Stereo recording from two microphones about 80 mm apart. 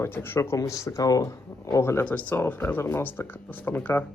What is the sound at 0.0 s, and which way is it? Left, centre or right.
Speech, left.